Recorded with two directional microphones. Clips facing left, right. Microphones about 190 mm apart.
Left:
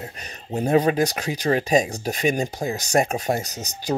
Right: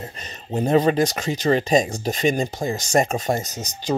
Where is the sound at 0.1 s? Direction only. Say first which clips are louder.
Right 2 dB; 10° left (ahead or behind).